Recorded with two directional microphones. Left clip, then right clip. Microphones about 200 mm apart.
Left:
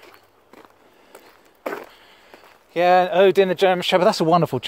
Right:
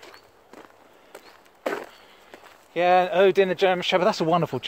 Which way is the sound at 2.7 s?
45° left (ahead or behind).